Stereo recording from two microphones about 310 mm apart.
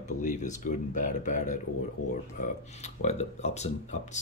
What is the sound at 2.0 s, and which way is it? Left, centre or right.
Speech, left.